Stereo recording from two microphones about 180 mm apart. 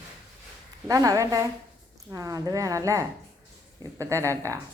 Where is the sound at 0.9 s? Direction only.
20° right (ahead or behind).